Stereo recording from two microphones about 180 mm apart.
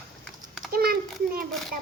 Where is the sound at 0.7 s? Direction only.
55° right (ahead or behind).